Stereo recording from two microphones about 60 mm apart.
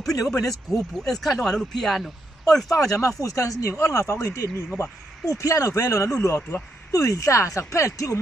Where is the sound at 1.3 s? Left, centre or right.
Centre.